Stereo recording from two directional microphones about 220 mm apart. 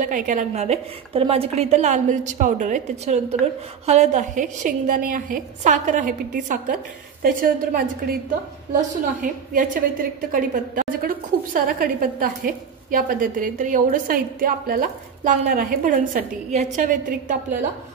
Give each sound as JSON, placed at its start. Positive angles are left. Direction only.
{"t": 0.0, "sound": "a woman's voice", "side_deg": -35}
{"t": 9.2, "sound": "a woman's voice", "side_deg": -40}